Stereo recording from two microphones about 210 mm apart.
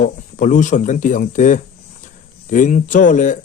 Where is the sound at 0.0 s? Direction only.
40° left (ahead or behind).